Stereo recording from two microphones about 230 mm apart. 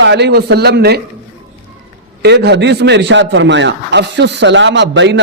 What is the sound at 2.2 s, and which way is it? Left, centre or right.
A man's voice, right.